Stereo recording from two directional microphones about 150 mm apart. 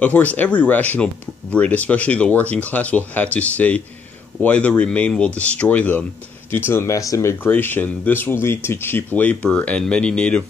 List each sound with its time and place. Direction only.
0.0 s speech: 10° left (ahead or behind)